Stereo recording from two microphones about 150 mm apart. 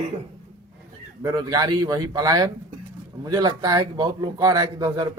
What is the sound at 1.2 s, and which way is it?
A man's voice, 25° right (ahead or behind).